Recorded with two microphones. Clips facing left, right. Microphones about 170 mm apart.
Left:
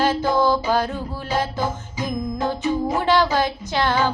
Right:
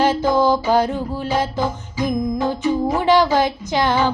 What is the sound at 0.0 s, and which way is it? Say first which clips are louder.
Music: right 3 dB; 15° right (ahead or behind).